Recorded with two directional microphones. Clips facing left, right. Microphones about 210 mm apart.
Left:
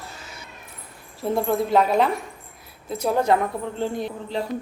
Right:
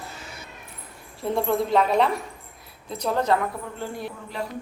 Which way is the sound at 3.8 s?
20° left (ahead or behind).